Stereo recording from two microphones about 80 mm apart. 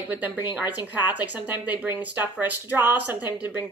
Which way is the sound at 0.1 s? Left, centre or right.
Right.